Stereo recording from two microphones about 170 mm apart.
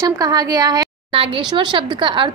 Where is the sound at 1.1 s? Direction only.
30° right (ahead or behind).